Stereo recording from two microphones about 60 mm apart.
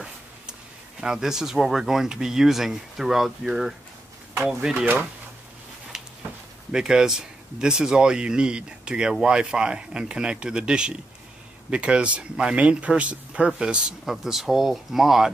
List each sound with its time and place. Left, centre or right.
1.0 s speech: centre
6.7 s speech: centre
14.0 s speech: centre